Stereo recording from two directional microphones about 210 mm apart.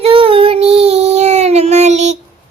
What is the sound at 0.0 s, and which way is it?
Child singing, 25° right (ahead or behind).